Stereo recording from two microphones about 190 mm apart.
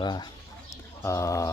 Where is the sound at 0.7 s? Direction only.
15° left (ahead or behind).